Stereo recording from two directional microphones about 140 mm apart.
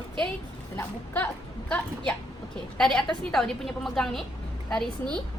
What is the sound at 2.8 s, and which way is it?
A woman's voice, 5° left (ahead or behind).